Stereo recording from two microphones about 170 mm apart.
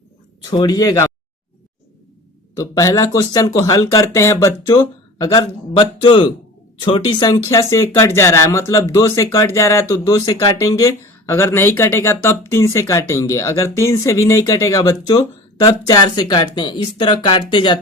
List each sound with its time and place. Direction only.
0.4 s speech: 25° left (ahead or behind)
2.6 s speech: 20° left (ahead or behind)